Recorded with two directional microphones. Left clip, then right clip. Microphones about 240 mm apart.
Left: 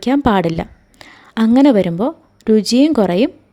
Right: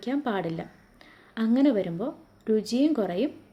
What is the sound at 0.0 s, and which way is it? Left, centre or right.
A woman's voice, left.